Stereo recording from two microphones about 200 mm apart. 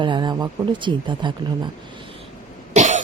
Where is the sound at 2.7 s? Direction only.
35° right (ahead or behind).